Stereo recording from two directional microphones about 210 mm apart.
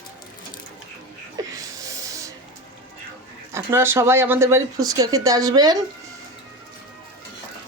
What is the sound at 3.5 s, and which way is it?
Speech, 10° right (ahead or behind).